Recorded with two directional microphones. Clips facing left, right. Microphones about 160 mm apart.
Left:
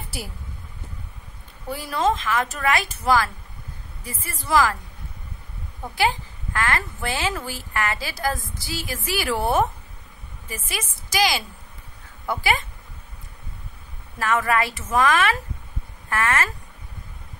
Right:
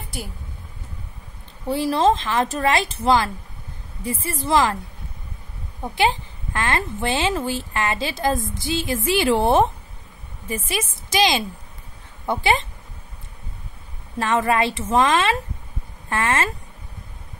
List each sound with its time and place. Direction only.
1.7 s a woman's voice: 30° right (ahead or behind)
5.8 s a woman's voice: 25° right (ahead or behind)
14.1 s a woman's voice: 25° right (ahead or behind)